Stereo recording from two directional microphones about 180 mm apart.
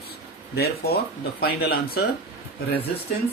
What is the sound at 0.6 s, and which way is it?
Speech, 60° left (ahead or behind).